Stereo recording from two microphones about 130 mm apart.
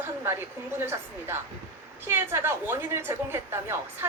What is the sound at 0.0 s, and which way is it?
A woman's voice, 20° right (ahead or behind).